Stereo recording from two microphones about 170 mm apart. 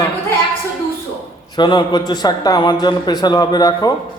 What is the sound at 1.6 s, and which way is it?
Speech, 25° left (ahead or behind).